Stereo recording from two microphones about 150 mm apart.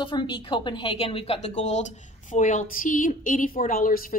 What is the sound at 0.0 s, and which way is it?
A woman's voice, 30° left (ahead or behind).